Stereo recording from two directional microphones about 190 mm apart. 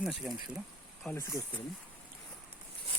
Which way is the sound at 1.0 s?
10° left (ahead or behind).